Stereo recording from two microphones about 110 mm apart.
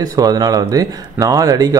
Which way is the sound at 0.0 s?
35° right (ahead or behind).